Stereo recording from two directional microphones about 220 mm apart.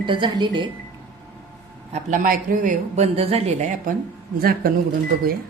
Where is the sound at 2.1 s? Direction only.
40° right (ahead or behind).